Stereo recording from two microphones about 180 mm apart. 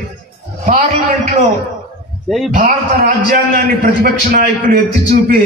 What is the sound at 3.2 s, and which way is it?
A man's voice, 55° right (ahead or behind).